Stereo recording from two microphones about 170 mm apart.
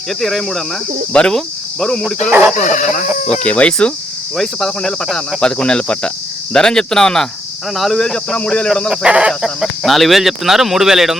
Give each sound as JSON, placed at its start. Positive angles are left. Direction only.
{"t": 0.2, "sound": "speech", "side_deg": 0}
{"t": 2.6, "sound": "speech", "side_deg": 45}
{"t": 3.2, "sound": "speech", "side_deg": 5}